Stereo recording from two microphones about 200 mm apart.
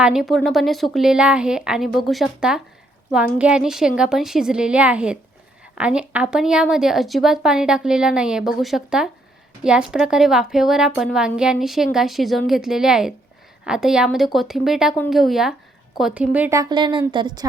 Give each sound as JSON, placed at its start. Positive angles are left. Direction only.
{"t": 0.0, "sound": "a woman's voice", "side_deg": 0}